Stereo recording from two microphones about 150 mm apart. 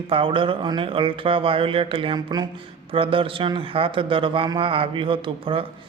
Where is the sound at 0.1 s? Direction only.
35° right (ahead or behind).